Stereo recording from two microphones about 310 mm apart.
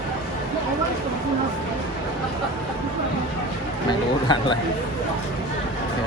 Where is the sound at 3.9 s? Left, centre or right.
Centre.